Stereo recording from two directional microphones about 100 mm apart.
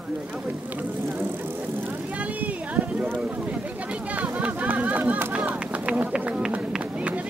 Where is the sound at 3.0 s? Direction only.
15° right (ahead or behind).